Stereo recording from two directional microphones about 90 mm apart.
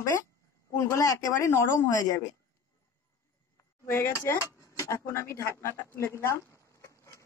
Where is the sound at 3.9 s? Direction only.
35° left (ahead or behind).